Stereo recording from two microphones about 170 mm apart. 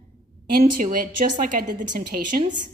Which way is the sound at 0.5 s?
55° right (ahead or behind).